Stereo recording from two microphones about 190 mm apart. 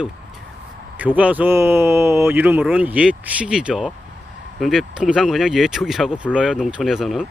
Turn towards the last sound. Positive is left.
turn(degrees=0)  # may be behind; listen again after turning